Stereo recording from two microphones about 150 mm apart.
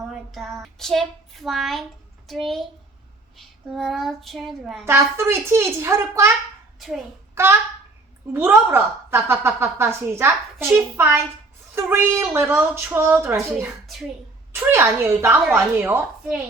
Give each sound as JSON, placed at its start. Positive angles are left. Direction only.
{"t": 0.1, "sound": "child singing", "side_deg": 0}
{"t": 2.2, "sound": "a child's voice", "side_deg": 0}
{"t": 4.9, "sound": "a woman's voice", "side_deg": -15}
{"t": 6.7, "sound": "a child's voice", "side_deg": 0}
{"t": 7.4, "sound": "a woman's voice", "side_deg": -20}
{"t": 14.5, "sound": "a woman's voice", "side_deg": -15}